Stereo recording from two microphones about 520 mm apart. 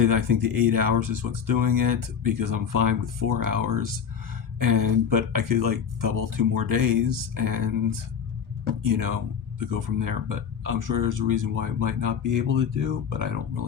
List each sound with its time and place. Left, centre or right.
0.0 s speech: right